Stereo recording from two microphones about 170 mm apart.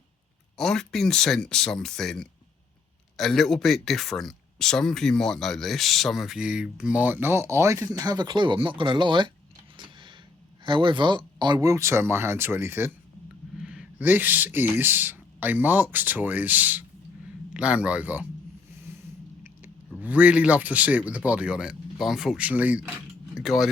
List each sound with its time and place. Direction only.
0.5 s speech: 5° left (ahead or behind); by 9.3 s 25° right (ahead or behind)
9.7 s a sound: 30° right (ahead or behind)
10.6 s a man's voice: 30° right (ahead or behind); by 18.3 s 10° right (ahead or behind)
18.9 s snort: 15° right (ahead or behind)
19.9 s a man's voice: 10° right (ahead or behind)